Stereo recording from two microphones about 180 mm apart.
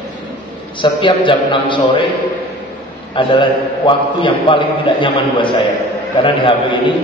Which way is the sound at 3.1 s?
25° left (ahead or behind).